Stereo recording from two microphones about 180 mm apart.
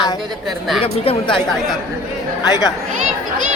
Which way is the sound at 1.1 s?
30° left (ahead or behind).